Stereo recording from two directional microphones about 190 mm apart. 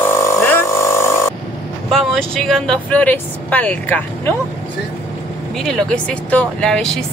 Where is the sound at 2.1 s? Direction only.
Centre (ahead or behind).